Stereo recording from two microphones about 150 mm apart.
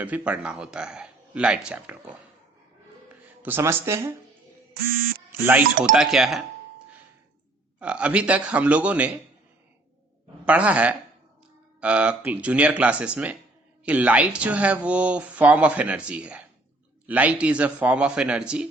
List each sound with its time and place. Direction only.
0.0 s speech: 10° right (ahead or behind)
3.4 s speech: 15° right (ahead or behind)
5.9 s speech: 5° right (ahead or behind)
7.8 s speech: 10° right (ahead or behind)
10.4 s speech: 10° right (ahead or behind)